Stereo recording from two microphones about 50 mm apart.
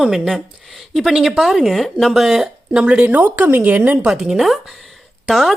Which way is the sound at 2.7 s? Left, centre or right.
Centre.